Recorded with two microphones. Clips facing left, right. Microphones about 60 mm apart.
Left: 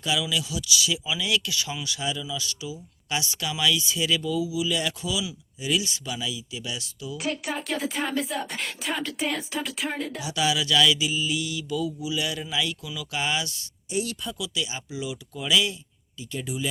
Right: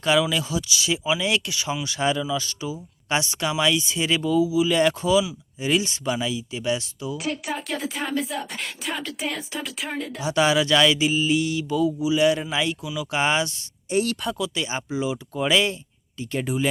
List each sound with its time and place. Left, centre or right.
0.0 s speech: right
2.0 s speech: right
7.2 s speech: centre
10.2 s speech: right
12.8 s speech: right
13.9 s speech: right
14.3 s speech: right